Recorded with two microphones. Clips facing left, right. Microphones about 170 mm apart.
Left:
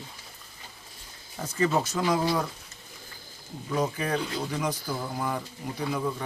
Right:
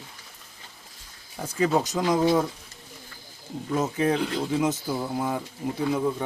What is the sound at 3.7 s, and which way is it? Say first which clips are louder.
Speech: right 4 dB; 25° right (ahead or behind).